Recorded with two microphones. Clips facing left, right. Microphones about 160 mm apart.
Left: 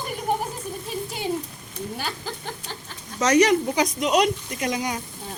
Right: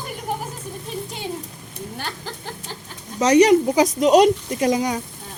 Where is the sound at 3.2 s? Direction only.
30° right (ahead or behind).